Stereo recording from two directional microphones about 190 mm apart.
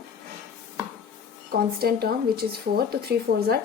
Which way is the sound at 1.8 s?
55° right (ahead or behind).